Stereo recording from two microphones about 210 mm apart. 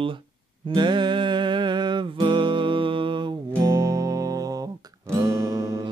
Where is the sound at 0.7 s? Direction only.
20° right (ahead or behind).